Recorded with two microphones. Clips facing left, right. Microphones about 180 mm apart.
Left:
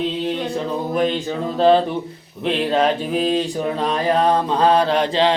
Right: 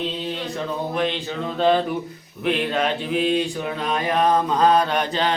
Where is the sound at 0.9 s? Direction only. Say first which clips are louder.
Left 6 dB; 40° left (ahead or behind).